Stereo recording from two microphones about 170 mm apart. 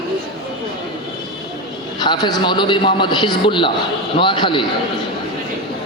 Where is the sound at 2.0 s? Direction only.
25° left (ahead or behind).